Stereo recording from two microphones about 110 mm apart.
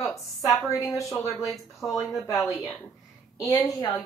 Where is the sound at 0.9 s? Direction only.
30° left (ahead or behind).